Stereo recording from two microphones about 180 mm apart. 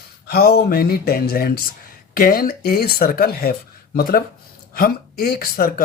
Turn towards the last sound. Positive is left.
turn(degrees=55)  # may be behind; listen again after turning